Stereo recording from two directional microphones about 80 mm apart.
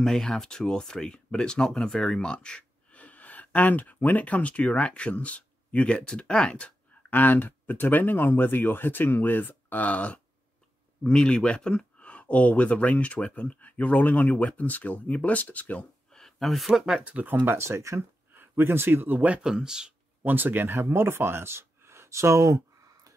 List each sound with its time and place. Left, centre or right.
0.0 s speech: centre
16.1 s speech: centre
17.0 s speech: centre
17.5 s speech: right; by 19.9 s centre
20.2 s speech: right